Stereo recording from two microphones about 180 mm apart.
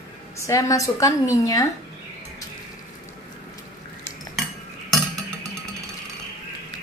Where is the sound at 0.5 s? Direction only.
20° left (ahead or behind).